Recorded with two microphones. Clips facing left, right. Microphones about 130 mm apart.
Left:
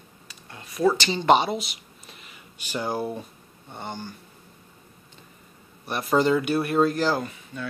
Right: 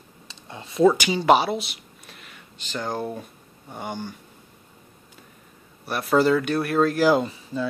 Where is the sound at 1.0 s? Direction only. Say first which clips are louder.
Right 1 dB; 5° right (ahead or behind).